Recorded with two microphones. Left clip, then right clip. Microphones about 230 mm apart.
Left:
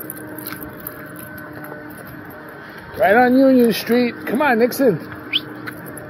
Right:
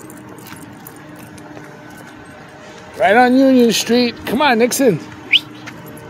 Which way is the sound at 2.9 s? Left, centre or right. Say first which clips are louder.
Right 2 dB; right.